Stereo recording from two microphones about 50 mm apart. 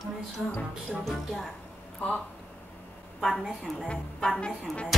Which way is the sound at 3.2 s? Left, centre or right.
Centre.